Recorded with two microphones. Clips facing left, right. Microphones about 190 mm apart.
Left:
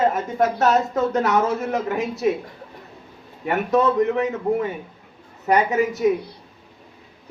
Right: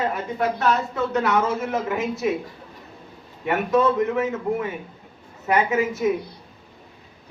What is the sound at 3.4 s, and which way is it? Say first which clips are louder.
Speech: left 1 dB; 35° left (ahead or behind).